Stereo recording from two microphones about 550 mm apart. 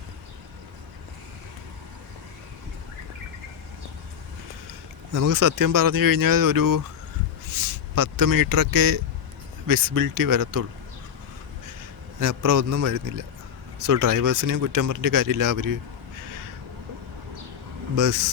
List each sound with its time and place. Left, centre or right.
5.1 s speech: right
12.2 s speech: right
17.9 s speech: right